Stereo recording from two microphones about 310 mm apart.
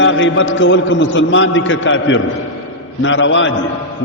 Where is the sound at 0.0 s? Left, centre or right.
Left.